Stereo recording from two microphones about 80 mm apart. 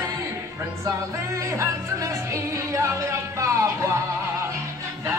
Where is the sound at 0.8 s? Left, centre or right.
Right.